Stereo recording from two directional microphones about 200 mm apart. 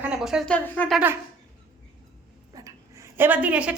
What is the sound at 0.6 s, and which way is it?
Speech, 10° left (ahead or behind).